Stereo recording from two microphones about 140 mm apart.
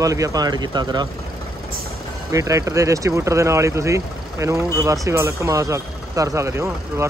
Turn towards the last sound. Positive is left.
turn(degrees=-20)  # may be behind; listen again after turning